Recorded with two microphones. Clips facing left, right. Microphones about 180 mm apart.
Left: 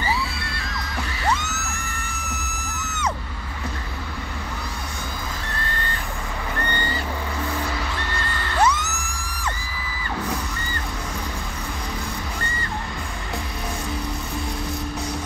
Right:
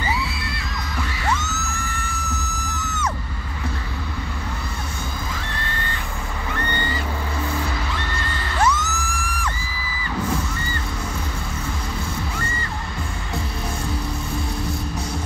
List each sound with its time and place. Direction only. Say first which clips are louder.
1.4 s music: right 2 dB; 15° left (ahead or behind)
8.7 s music: right 4 dB; 20° left (ahead or behind)